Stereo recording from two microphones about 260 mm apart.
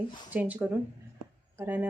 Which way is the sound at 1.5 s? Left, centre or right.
Centre.